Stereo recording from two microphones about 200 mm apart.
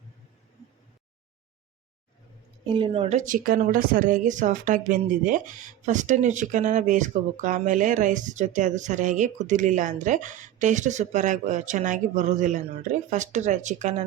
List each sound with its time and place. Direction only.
2.6 s speech: 25° right (ahead or behind)